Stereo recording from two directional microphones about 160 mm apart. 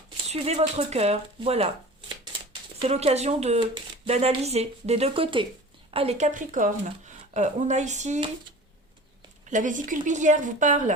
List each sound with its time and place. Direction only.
0.3 s a woman's voice: 45° right (ahead or behind)
9.5 s a woman's voice: 55° right (ahead or behind)